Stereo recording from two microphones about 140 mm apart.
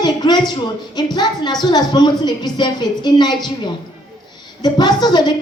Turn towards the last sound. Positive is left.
turn(degrees=30)  # may be behind; listen again after turning